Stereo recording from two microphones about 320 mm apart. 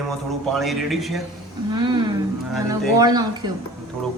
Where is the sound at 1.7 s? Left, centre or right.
Centre.